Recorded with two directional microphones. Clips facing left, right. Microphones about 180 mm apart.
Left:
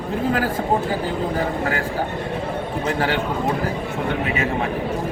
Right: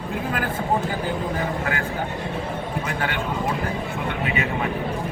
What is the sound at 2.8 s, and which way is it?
Speech, 35° left (ahead or behind).